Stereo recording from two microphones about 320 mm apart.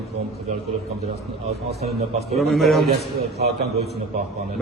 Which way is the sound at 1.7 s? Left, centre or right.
Right.